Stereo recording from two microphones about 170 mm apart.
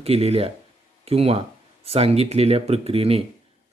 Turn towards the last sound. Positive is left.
turn(degrees=-35)  # may be behind; listen again after turning